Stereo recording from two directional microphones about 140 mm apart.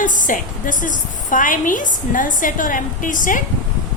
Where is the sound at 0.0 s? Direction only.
70° left (ahead or behind).